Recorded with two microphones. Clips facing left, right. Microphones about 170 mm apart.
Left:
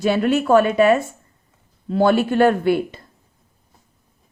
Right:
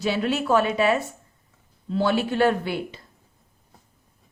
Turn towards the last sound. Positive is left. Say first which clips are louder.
# left 9 dB
turn(degrees=50)  # may be behind; listen again after turning